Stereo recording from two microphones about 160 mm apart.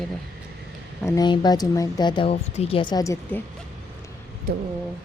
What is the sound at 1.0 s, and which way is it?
Speech, 25° left (ahead or behind).